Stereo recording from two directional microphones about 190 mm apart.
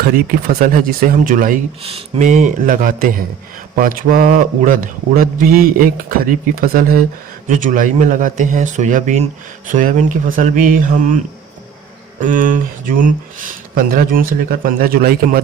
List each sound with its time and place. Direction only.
0.0 s speech: 50° right (ahead or behind)
1.8 s speech: 35° right (ahead or behind)
12.2 s speech: 45° right (ahead or behind)